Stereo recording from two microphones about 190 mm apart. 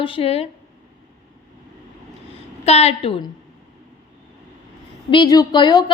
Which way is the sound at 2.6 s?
35° left (ahead or behind).